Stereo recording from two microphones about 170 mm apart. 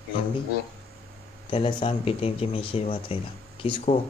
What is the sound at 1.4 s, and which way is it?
Speech, 30° left (ahead or behind).